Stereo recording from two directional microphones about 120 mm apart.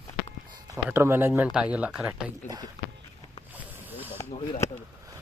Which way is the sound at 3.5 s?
15° right (ahead or behind).